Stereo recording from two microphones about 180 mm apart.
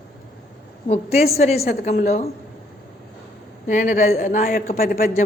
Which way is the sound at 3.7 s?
45° left (ahead or behind).